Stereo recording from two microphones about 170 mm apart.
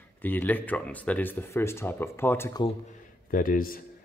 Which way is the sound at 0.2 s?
10° left (ahead or behind).